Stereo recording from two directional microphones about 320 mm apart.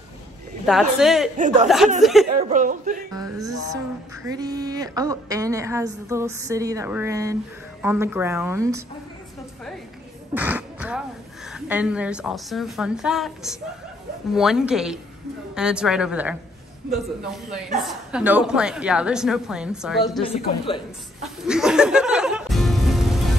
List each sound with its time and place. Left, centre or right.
0.7 s a woman's voice: centre
1.4 s music: right
2.0 s a woman's voice: centre
2.5 s music: right
3.2 s a woman's voice: centre
10.3 s a woman's voice: centre
21.5 s music: centre